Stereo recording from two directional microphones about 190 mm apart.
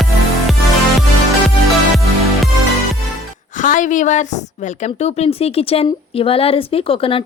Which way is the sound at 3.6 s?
40° left (ahead or behind).